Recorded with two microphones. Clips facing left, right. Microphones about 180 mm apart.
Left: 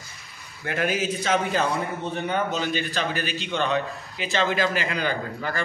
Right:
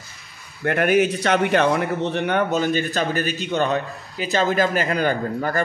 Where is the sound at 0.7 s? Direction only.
60° right (ahead or behind).